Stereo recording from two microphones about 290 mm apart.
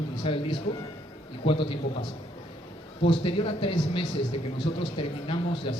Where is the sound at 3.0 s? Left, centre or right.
Centre.